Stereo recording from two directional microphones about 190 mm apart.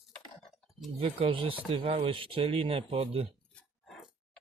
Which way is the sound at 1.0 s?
30° right (ahead or behind).